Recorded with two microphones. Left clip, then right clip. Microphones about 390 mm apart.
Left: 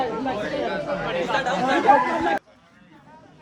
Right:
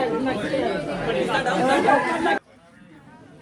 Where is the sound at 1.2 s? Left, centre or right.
Left.